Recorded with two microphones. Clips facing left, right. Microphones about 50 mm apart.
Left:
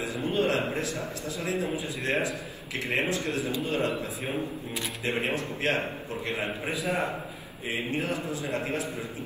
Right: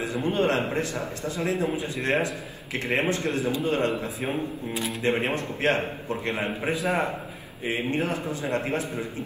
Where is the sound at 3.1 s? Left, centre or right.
Right.